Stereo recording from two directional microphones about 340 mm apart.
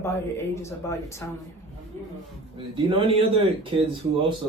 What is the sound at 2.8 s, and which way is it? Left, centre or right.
A man's voice, centre.